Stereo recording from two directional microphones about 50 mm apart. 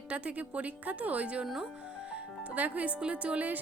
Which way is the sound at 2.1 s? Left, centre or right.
Right.